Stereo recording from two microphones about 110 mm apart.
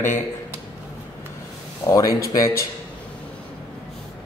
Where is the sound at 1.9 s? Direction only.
30° left (ahead or behind).